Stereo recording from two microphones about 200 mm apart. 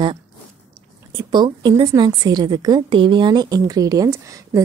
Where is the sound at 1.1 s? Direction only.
25° right (ahead or behind).